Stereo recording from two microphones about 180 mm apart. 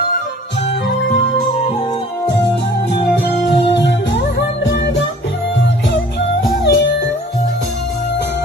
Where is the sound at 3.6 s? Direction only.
70° left (ahead or behind).